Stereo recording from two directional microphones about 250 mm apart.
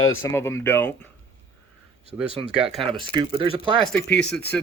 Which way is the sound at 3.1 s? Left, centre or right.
Centre.